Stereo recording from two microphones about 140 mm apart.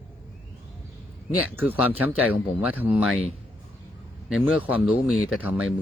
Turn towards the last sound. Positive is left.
turn(degrees=-5)  # may be behind; listen again after turning